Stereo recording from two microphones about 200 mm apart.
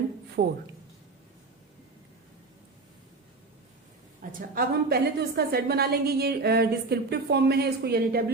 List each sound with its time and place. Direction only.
0.4 s a woman's voice: 50° right (ahead or behind)
4.2 s a woman's voice: 45° right (ahead or behind)